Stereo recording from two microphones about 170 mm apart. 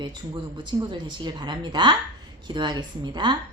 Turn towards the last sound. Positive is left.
turn(degrees=-25)  # may be behind; listen again after turning